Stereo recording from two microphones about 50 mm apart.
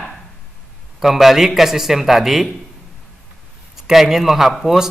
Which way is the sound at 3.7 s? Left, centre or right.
Centre.